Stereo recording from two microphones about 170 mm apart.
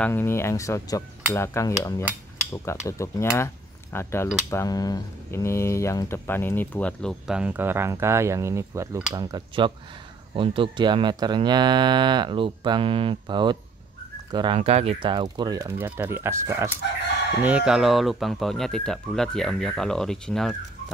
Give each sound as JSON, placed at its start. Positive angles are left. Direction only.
{"t": 0.0, "sound": "speech", "side_deg": 15}